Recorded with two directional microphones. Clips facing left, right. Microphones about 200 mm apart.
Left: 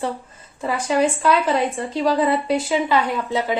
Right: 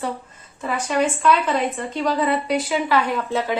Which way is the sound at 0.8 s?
30° left (ahead or behind).